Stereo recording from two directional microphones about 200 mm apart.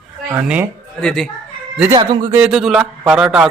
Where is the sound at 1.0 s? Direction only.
5° left (ahead or behind).